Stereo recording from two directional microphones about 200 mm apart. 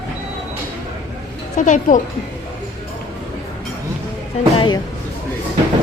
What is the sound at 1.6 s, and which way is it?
Speech, 40° left (ahead or behind).